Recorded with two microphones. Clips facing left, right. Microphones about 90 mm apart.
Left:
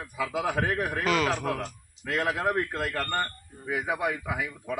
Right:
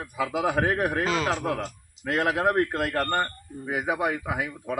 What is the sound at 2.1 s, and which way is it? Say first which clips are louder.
Speech: right 3 dB; 55° right (ahead or behind).